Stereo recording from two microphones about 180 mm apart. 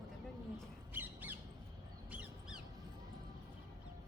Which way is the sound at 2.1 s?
5° right (ahead or behind).